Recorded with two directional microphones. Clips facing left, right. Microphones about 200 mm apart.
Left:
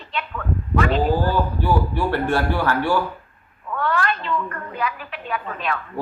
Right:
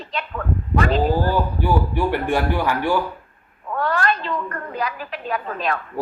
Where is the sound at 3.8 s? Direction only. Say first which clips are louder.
Right 1 dB; 40° right (ahead or behind).